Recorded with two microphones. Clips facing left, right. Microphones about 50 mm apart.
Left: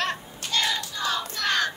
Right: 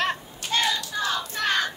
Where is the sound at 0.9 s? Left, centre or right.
Centre.